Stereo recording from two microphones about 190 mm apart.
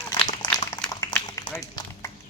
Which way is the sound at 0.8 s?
5° left (ahead or behind).